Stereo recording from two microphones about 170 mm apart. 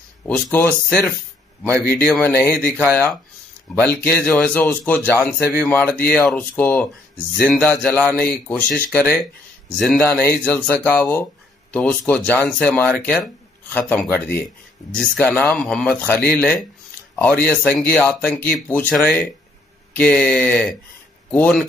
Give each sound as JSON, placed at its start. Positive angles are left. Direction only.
{"t": 0.3, "sound": "speech", "side_deg": 10}
{"t": 2.0, "sound": "speech", "side_deg": 5}